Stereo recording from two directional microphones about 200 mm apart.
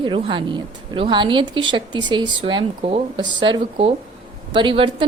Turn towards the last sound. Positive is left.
turn(degrees=-25)  # may be behind; listen again after turning